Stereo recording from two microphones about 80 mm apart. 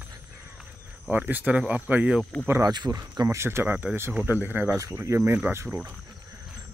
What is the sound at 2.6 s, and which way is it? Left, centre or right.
Cricket, right.